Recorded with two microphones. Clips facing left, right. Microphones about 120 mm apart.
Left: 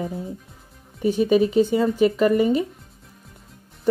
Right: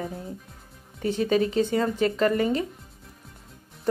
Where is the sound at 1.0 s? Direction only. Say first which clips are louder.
Left 5 dB; 10° left (ahead or behind).